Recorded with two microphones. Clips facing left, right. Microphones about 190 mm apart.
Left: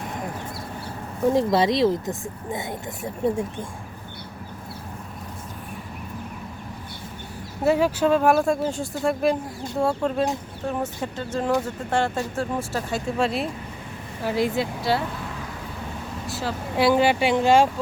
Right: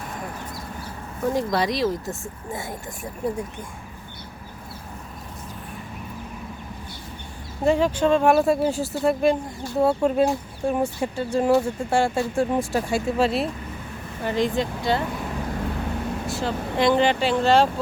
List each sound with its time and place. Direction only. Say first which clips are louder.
1.3 s speech: left 3 dB; 25° left (ahead or behind)
7.6 s speech: even; 5° left (ahead or behind); by 13.0 s 15° right (ahead or behind)
13.1 s speech: right 2 dB; centre (ahead or behind)
16.2 s speech: right 3 dB; centre (ahead or behind)